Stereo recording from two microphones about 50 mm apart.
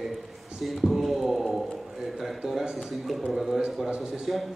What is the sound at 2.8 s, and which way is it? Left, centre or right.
A man's voice, centre.